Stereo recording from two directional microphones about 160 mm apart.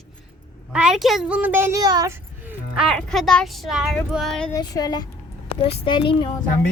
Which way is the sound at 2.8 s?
Centre (ahead or behind).